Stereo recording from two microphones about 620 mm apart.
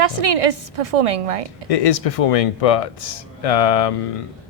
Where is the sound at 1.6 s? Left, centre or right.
Left.